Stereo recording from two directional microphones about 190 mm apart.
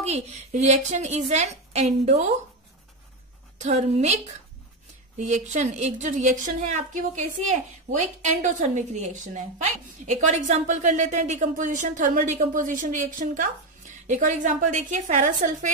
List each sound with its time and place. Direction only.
0.0 s a woman's voice: 35° right (ahead or behind)
3.5 s a woman's voice: 35° right (ahead or behind)
5.2 s a woman's voice: 40° right (ahead or behind)
8.0 s a woman's voice: 40° right (ahead or behind)